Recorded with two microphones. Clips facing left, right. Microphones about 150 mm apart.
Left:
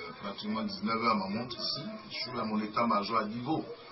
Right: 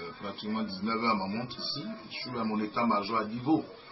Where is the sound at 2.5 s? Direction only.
Centre (ahead or behind).